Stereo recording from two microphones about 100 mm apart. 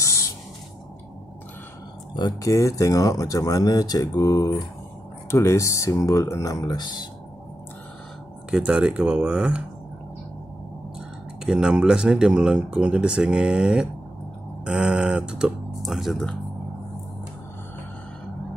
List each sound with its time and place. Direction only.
0.0 s spray: 30° left (ahead or behind)
2.1 s speech: 45° left (ahead or behind)
2.5 s speech: 30° left (ahead or behind); by 7.1 s 45° left (ahead or behind)
8.5 s speech: 5° right (ahead or behind)
11.4 s speech: 10° right (ahead or behind)